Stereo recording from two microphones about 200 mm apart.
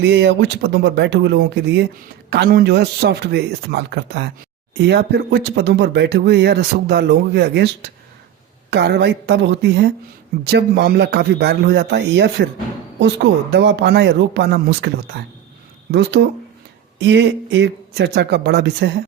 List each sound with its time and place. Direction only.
0.0 s speech: 55° right (ahead or behind)